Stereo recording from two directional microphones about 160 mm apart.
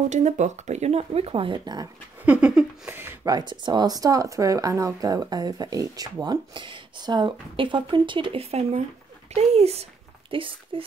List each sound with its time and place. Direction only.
0.1 s speech: 45° right (ahead or behind); by 1.9 s 30° right (ahead or behind)
2.2 s speech: 5° right (ahead or behind)
3.3 s speech: 30° right (ahead or behind)